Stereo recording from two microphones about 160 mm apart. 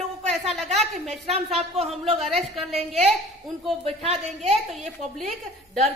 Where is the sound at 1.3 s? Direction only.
40° right (ahead or behind).